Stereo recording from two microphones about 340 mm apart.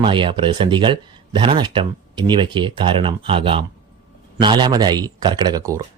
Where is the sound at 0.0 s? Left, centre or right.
Centre.